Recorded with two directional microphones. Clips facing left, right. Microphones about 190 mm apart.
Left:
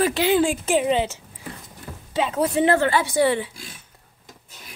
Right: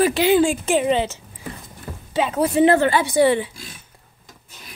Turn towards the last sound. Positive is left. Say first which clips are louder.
# right 3 dB
turn(degrees=-20)  # may be behind; listen again after turning